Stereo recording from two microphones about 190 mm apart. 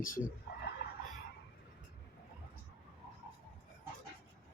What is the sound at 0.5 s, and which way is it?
Dog, 60° left (ahead or behind).